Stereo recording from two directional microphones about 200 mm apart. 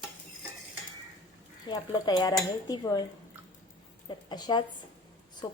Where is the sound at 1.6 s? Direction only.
20° left (ahead or behind).